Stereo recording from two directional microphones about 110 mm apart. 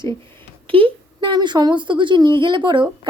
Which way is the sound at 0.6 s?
55° right (ahead or behind).